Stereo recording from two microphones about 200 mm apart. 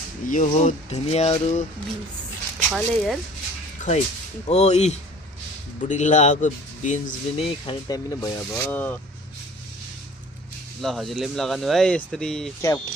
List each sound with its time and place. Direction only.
0.3 s speech: 40° left (ahead or behind)
2.6 s speech: centre (ahead or behind)
3.8 s music: 40° left (ahead or behind)
4.4 s speech: 35° left (ahead or behind)
7.4 s speech: 20° left (ahead or behind)
10.8 s speech: centre (ahead or behind)